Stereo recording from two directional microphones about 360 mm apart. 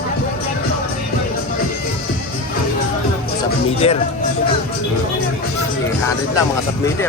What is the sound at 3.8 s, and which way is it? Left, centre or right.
Speech, centre.